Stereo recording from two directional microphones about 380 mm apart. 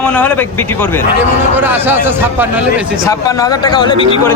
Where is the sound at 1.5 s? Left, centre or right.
Centre.